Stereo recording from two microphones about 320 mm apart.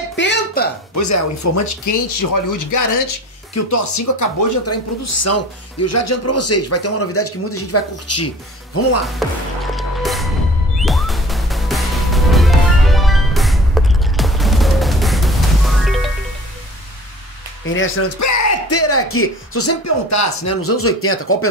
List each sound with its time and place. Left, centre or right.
0.1 s a sound: left
0.9 s speech: left
3.5 s speech: left
9.2 s speech: centre
9.8 s music: centre
17.6 s speech: left